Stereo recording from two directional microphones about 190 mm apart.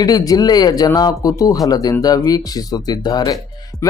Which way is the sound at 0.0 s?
20° left (ahead or behind).